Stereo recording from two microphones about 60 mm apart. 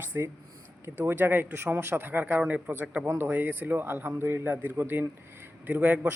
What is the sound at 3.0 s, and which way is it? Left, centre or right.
Speech, right.